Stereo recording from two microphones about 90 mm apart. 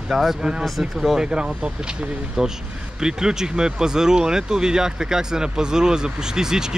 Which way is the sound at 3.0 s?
5° right (ahead or behind).